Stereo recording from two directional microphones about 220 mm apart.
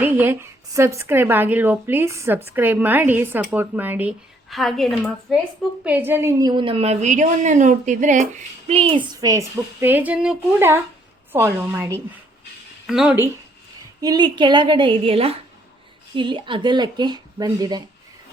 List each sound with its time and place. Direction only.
0.0 s a woman's voice: 10° right (ahead or behind)
14.0 s a woman's voice: 20° right (ahead or behind)